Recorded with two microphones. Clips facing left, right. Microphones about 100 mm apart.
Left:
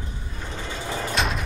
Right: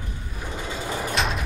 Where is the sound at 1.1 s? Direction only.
Centre (ahead or behind).